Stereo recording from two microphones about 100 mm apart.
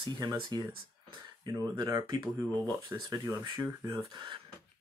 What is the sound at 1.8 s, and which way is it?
Speech, 45° right (ahead or behind).